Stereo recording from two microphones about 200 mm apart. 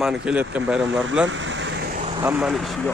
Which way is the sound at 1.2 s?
70° right (ahead or behind).